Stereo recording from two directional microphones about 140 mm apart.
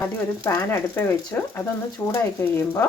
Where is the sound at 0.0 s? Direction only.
15° left (ahead or behind).